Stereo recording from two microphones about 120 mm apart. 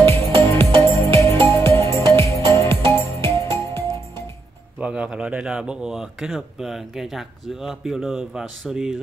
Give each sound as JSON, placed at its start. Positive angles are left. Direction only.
{"t": 0.0, "sound": "music", "side_deg": 20}
{"t": 4.7, "sound": "speech", "side_deg": -10}